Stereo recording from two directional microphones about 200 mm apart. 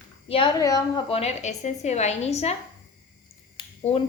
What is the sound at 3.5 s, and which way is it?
Finger snapping, 30° left (ahead or behind).